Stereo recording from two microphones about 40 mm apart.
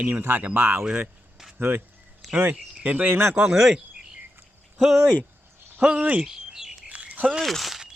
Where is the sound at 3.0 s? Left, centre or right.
Right.